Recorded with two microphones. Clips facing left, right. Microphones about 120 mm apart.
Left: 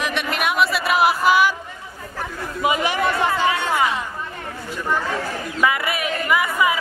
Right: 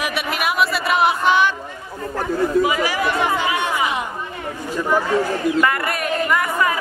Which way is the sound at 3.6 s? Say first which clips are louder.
Even; 15° right (ahead or behind).